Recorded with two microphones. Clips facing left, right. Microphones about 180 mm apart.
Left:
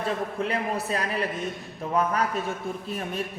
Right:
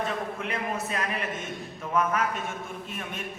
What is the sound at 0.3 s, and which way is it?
A man's voice, 35° left (ahead or behind).